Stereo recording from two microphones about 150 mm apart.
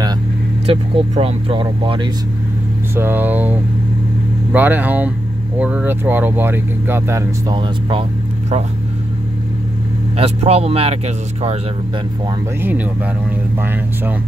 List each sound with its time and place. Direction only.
0.7 s speech: 40° right (ahead or behind)
3.0 s speech: 15° right (ahead or behind)
10.1 s speech: 45° right (ahead or behind)
12.6 s speech: 10° right (ahead or behind)